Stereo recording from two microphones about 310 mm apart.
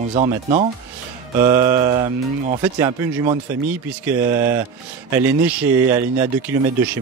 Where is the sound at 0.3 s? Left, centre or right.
Centre.